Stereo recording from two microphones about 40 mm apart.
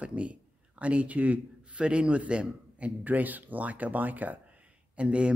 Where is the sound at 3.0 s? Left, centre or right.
Right.